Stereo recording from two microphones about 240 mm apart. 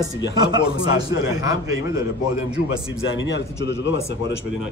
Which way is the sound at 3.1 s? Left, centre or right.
Left.